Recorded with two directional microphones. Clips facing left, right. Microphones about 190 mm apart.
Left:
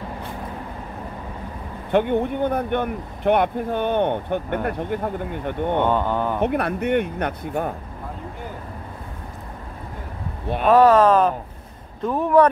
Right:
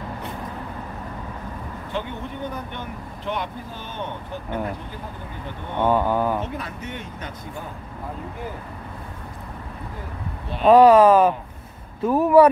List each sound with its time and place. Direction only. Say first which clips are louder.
1.9 s speech: left 12 dB; 60° left (ahead or behind)
5.9 s speech: right 1 dB; 5° right (ahead or behind)
6.4 s speech: left 10 dB; 65° left (ahead or behind)
10.7 s speech: right 2 dB; 10° right (ahead or behind)